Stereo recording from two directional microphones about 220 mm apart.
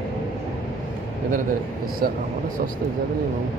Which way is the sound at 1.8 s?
40° right (ahead or behind).